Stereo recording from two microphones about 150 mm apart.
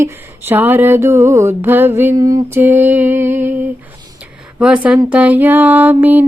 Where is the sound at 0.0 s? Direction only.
15° right (ahead or behind).